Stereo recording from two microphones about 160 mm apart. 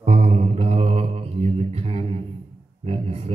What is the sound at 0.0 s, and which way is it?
Mantra, 40° right (ahead or behind).